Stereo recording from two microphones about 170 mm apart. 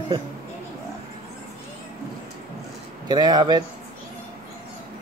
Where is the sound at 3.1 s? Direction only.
25° right (ahead or behind).